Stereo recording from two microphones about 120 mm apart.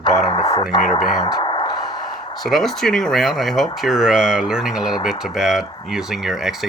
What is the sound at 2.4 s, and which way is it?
Speech, centre (ahead or behind).